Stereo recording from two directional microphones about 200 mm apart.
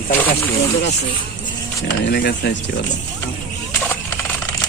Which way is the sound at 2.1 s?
55° left (ahead or behind).